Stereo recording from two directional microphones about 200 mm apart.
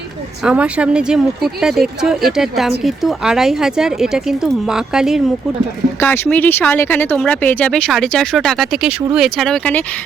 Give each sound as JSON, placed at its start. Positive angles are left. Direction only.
{"t": 0.4, "sound": "speech", "side_deg": -5}
{"t": 6.0, "sound": "speech", "side_deg": 10}